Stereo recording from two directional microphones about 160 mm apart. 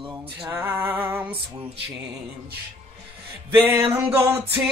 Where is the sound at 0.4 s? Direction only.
10° right (ahead or behind).